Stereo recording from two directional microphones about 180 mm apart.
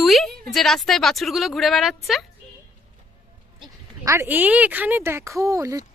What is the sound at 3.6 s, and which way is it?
Speech, 15° right (ahead or behind).